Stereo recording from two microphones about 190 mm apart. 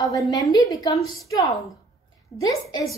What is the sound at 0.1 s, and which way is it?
A woman's voice, 20° left (ahead or behind).